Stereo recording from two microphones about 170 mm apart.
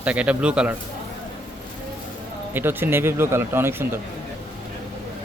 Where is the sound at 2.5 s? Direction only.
10° right (ahead or behind).